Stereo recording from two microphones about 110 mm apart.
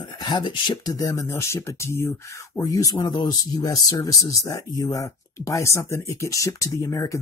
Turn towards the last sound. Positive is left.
turn(degrees=30)  # may be behind; listen again after turning